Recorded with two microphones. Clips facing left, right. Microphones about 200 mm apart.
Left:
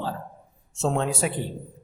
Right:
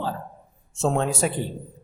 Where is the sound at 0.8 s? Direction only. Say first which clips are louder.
Right 2 dB; 45° right (ahead or behind).